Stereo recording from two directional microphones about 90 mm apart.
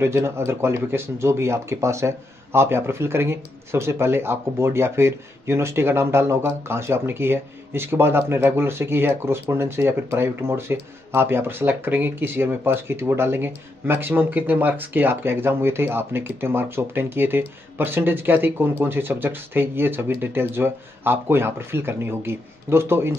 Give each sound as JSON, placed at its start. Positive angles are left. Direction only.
{"t": 0.0, "sound": "speech", "side_deg": -30}